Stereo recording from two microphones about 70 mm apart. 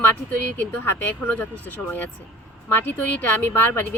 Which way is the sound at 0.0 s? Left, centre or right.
Left.